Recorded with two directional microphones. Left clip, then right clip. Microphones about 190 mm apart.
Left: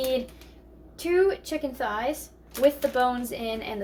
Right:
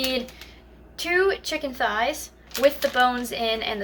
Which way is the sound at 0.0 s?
Centre (ahead or behind).